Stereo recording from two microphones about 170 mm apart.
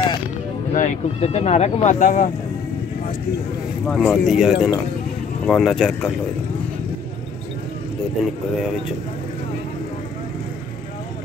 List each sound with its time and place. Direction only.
0.7 s speech: 45° left (ahead or behind)
3.8 s speech: 5° left (ahead or behind)